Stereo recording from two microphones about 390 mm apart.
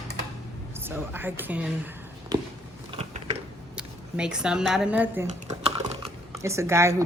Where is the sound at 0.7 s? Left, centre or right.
Centre.